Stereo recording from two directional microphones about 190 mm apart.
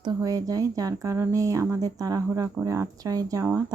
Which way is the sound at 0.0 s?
20° right (ahead or behind).